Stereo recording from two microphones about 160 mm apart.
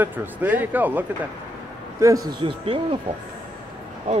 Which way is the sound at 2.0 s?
25° right (ahead or behind).